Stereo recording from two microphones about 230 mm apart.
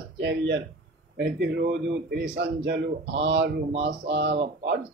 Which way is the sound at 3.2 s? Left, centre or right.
Right.